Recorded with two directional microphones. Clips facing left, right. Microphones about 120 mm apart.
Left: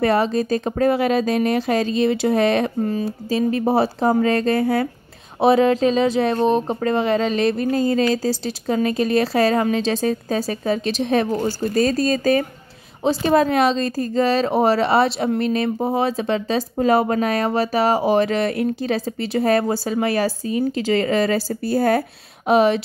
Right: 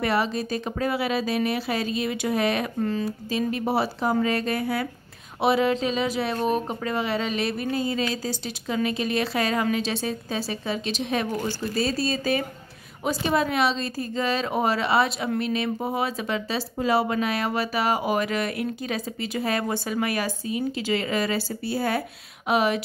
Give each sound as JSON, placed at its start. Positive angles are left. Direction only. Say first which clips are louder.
{"t": 0.0, "sound": "speech", "louder": "left 6 dB", "side_deg": 40}